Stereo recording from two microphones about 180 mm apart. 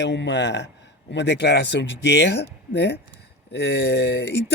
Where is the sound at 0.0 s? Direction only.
80° left.